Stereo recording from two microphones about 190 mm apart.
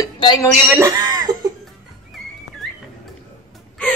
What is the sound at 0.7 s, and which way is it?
Speech, 15° right (ahead or behind).